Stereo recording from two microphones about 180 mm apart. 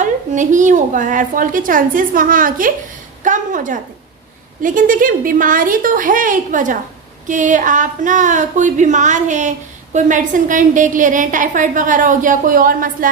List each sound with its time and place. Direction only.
0.0 s speech: 45° right (ahead or behind)